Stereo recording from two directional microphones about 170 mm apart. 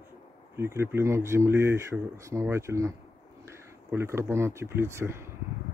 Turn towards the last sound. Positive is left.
turn(degrees=-15)  # may be behind; listen again after turning